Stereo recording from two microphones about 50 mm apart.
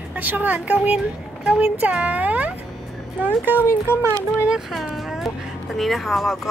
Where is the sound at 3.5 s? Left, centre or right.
Right.